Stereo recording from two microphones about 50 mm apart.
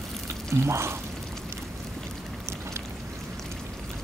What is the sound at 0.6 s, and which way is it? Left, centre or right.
Speech, right.